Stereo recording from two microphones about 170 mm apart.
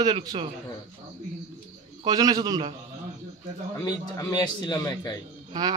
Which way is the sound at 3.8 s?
25° left (ahead or behind).